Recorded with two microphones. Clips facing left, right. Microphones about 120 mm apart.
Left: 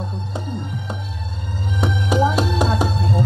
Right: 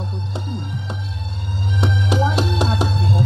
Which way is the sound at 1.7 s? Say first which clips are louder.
Even; 45° left (ahead or behind).